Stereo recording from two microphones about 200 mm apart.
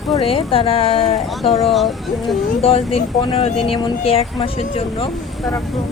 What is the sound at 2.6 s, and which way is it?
Speech, 30° left (ahead or behind).